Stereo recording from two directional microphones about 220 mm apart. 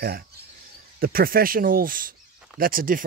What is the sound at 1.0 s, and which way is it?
Speech, 40° right (ahead or behind).